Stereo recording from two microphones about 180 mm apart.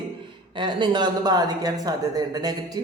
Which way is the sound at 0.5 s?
25° right (ahead or behind).